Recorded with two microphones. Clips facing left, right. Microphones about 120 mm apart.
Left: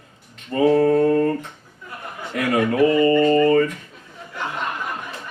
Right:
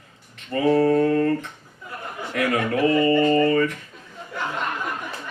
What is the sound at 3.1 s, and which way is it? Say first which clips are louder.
Speech: left 3 dB; 35° left (ahead or behind).